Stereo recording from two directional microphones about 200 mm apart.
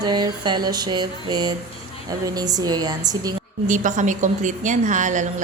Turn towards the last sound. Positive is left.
turn(degrees=-35)  # may be behind; listen again after turning